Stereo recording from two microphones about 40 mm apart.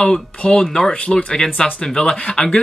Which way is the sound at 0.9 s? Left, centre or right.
Left.